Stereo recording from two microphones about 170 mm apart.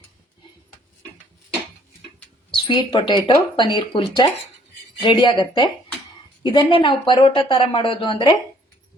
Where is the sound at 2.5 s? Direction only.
30° left (ahead or behind).